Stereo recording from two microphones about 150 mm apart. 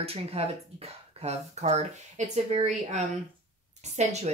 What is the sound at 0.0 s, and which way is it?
Speech, 40° right (ahead or behind).